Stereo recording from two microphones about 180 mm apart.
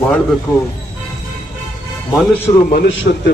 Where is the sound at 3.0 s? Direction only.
60° left (ahead or behind).